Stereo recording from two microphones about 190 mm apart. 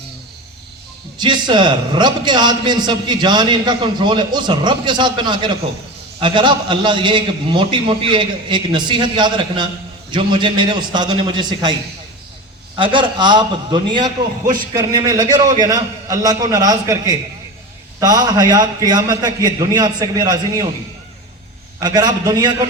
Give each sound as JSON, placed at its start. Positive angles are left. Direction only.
{"t": 1.2, "sound": "a man's voice", "side_deg": -25}
{"t": 12.7, "sound": "a man's voice", "side_deg": -25}
{"t": 14.4, "sound": "speech", "side_deg": -50}
{"t": 14.8, "sound": "a man's voice", "side_deg": -20}
{"t": 21.8, "sound": "a man's voice", "side_deg": -20}